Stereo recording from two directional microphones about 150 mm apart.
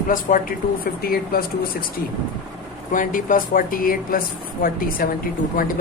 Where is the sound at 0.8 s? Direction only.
80° left.